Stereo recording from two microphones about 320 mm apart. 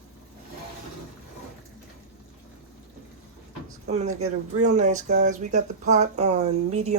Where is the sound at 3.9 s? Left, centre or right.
Right.